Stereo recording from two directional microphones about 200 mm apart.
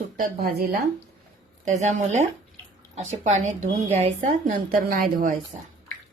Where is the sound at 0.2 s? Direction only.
45° right (ahead or behind).